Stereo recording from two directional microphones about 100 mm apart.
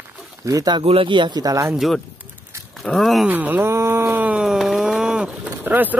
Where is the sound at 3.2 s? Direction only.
15° right (ahead or behind).